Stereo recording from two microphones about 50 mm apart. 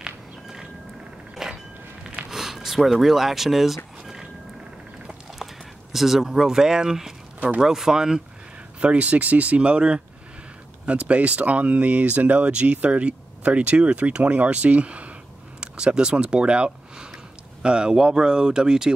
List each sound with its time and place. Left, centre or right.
0.0 s walk: centre
1.3 s a sound: centre
2.9 s speech: centre
5.4 s speech: centre
8.7 s speech: right